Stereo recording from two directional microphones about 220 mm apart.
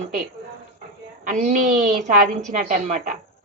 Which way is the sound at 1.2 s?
35° right (ahead or behind).